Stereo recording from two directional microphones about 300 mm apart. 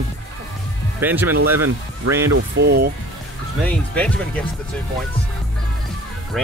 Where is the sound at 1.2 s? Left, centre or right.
Right.